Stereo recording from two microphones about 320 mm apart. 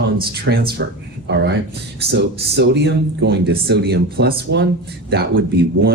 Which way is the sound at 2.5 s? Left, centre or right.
Right.